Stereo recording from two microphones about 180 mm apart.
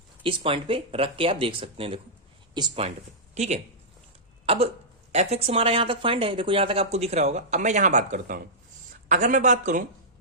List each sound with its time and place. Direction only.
0.2 s speech: 30° right (ahead or behind)
4.4 s a sound: 35° right (ahead or behind)
5.1 s speech: 35° right (ahead or behind)